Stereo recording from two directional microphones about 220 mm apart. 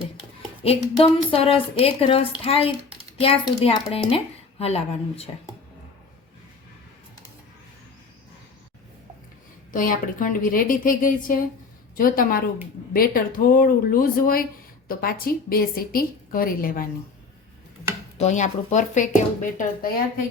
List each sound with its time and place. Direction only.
0.6 s a woman's voice: 25° left (ahead or behind)
9.7 s a woman's voice: 40° left (ahead or behind)
18.2 s a woman's voice: 35° left (ahead or behind)